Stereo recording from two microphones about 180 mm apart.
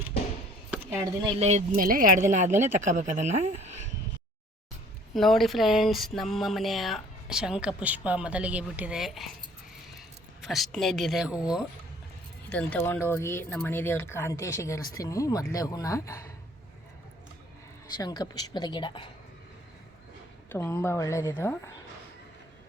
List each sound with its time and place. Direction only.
0.7 s speech: 15° right (ahead or behind)
1.4 s speech: 40° right (ahead or behind)
5.1 s speech: centre (ahead or behind)
10.4 s speech: centre (ahead or behind)
12.5 s speech: 10° left (ahead or behind)
17.9 s speech: 20° left (ahead or behind)
20.5 s speech: 15° left (ahead or behind)